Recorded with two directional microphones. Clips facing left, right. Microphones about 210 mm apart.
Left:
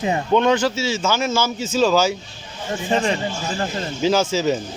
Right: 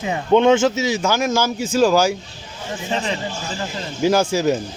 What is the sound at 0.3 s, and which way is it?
Speech, 20° right (ahead or behind).